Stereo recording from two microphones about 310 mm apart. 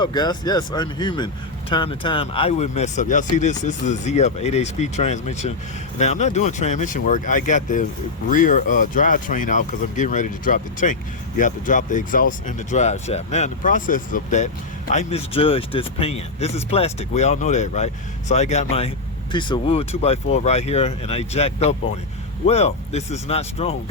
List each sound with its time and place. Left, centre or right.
0.0 s speech: centre